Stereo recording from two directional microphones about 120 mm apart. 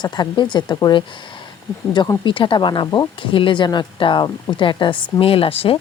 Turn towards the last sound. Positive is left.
turn(degrees=50)  # may be behind; listen again after turning